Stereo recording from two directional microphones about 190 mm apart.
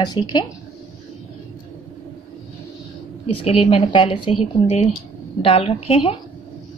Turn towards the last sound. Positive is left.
turn(degrees=30)  # may be behind; listen again after turning